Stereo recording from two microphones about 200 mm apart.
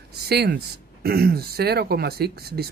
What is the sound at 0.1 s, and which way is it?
Speech, 55° right (ahead or behind).